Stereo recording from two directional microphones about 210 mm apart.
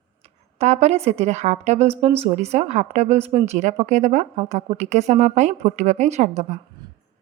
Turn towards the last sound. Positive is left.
turn(degrees=-35)  # may be behind; listen again after turning